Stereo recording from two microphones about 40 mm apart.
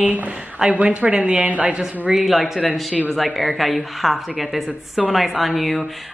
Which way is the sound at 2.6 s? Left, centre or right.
Left.